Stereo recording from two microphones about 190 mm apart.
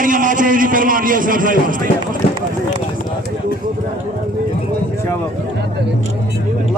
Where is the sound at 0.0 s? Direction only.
45° right (ahead or behind).